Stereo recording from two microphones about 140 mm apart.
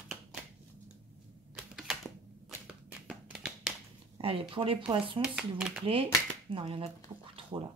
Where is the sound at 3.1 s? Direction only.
5° right (ahead or behind).